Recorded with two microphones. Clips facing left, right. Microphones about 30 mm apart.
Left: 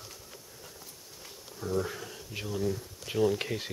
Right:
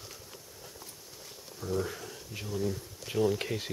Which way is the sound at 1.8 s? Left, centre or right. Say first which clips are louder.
Left 1 dB; centre.